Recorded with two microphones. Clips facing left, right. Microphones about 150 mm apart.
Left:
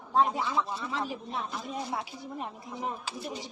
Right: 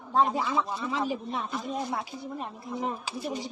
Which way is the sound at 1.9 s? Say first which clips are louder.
Right 2 dB; 10° left (ahead or behind).